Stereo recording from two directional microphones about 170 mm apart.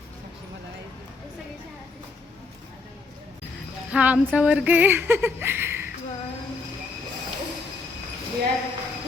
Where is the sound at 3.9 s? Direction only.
10° right (ahead or behind).